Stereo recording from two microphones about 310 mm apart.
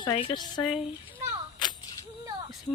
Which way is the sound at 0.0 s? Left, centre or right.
Centre.